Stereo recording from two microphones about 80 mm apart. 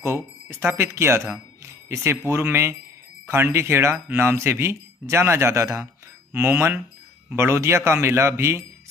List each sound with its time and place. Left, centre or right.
0.0 s speech: right